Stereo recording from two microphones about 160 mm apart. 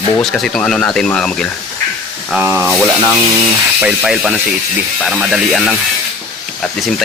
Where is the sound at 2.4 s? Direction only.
15° right (ahead or behind).